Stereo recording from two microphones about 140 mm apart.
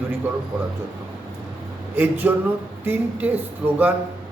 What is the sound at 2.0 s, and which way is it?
A man's voice, 15° right (ahead or behind).